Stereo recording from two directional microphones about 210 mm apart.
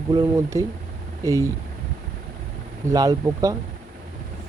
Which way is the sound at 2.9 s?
15° right (ahead or behind).